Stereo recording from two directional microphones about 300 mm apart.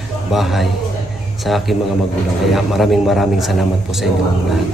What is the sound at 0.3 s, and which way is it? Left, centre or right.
Speech, centre.